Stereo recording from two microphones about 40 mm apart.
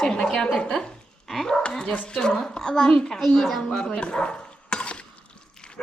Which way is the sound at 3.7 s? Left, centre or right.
Left.